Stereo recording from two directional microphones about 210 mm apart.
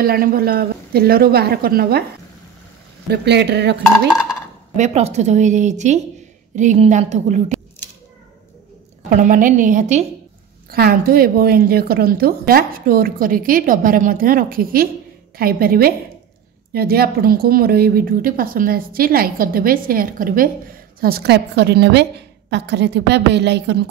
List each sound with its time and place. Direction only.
0.0 s a woman's voice: 45° right (ahead or behind)
3.1 s a woman's voice: 55° right (ahead or behind)
4.7 s speech: 35° right (ahead or behind)
9.1 s speech: 40° right (ahead or behind)
10.7 s a woman's voice: 45° right (ahead or behind)